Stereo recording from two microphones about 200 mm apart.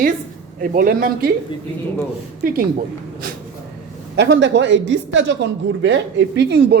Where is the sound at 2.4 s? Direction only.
45° right (ahead or behind).